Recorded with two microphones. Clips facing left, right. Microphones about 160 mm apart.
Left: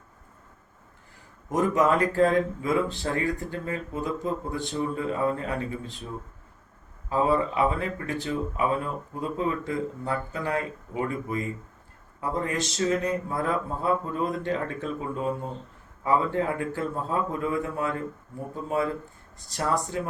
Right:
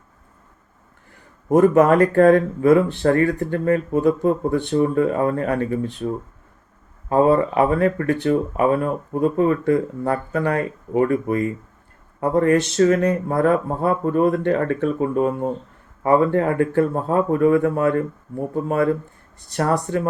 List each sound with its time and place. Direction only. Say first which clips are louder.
1.5 s speech: right 9 dB; 55° right (ahead or behind)
7.1 s speech: right 8 dB; 55° right (ahead or behind)